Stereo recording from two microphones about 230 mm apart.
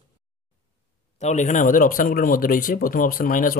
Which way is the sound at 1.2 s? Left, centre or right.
Left.